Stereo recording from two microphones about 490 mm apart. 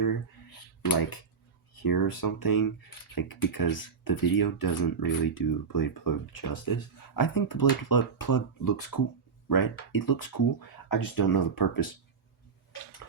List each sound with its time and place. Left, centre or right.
0.9 s speech: left